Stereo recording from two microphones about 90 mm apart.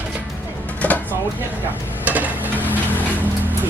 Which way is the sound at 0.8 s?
20° left (ahead or behind).